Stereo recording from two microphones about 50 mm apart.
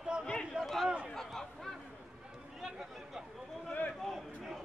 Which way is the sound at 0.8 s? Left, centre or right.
Centre.